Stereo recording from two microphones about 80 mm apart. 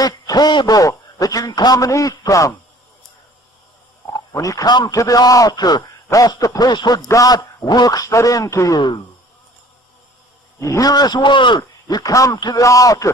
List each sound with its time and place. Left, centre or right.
0.0 s speech: left
0.7 s a man's voice: left
4.3 s a man's voice: left
6.0 s a man's voice: left
6.7 s speech: left
7.1 s a man's voice: left
8.7 s speech: left
10.6 s speech: left
12.0 s a man's voice: left
12.4 s speech: left
12.6 s a man's voice: left